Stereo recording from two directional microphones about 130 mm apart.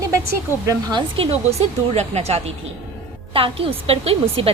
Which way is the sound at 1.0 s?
45° right (ahead or behind).